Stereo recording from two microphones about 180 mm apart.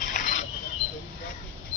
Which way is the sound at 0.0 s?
45° left (ahead or behind).